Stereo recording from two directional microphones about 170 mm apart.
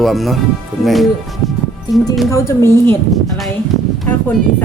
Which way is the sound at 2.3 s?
15° left (ahead or behind).